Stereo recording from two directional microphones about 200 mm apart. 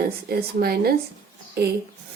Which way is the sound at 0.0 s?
50° right (ahead or behind).